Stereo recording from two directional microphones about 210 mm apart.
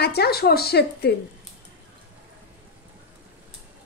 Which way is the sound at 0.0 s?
50° left (ahead or behind).